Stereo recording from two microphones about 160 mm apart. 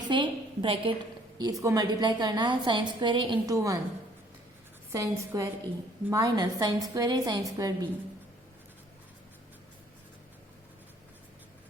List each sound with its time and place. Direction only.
0.1 s a woman's voice: 30° right (ahead or behind)
1.4 s a woman's voice: 20° right (ahead or behind)
4.9 s a woman's voice: 20° right (ahead or behind)